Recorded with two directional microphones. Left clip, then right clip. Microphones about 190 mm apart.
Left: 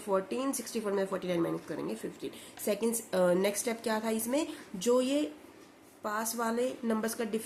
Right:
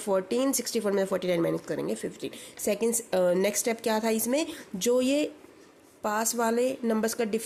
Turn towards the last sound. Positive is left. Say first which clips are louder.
# right 5 dB
turn(degrees=-40)  # may be behind; listen again after turning